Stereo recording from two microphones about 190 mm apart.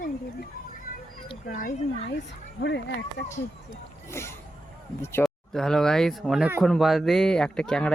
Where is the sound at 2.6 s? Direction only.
65° left (ahead or behind).